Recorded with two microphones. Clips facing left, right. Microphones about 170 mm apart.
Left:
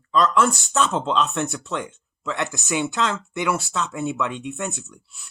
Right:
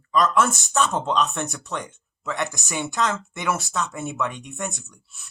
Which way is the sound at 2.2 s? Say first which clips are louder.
Left 1 dB; 15° right (ahead or behind).